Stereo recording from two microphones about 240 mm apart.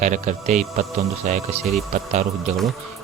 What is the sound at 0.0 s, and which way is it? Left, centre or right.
A man's voice, right.